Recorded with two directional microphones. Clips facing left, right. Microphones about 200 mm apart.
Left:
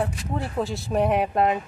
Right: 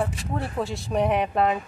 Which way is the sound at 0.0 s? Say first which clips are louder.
Even; centre (ahead or behind).